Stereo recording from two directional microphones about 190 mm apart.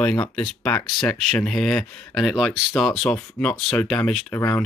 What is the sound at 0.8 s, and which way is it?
Speech, 20° left (ahead or behind).